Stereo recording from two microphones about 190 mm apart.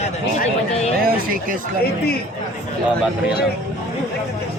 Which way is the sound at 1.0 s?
50° right (ahead or behind).